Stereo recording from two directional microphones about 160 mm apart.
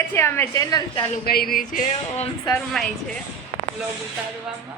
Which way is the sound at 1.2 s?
70° left (ahead or behind).